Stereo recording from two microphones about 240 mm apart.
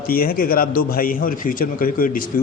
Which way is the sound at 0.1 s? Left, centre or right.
Left.